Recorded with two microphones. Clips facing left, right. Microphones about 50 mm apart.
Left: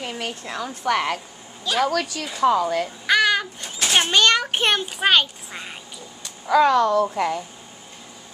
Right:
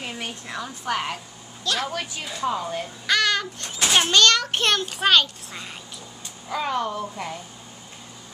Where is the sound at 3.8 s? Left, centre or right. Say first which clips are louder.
Even; centre.